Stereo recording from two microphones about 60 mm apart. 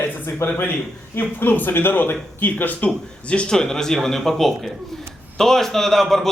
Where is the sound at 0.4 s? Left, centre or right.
Left.